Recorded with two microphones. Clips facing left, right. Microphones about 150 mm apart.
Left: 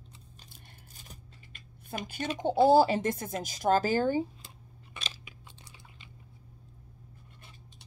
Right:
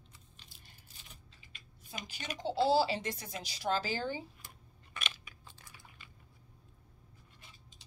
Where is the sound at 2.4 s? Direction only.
50° left (ahead or behind).